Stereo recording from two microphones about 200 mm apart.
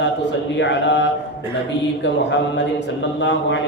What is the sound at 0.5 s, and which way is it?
Speech, 65° left (ahead or behind).